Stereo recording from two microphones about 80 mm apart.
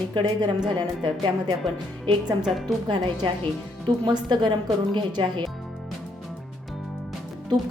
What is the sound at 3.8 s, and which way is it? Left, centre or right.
A woman's voice, right.